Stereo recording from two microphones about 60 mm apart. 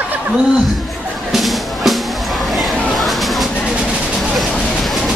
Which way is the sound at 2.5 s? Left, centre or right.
Centre.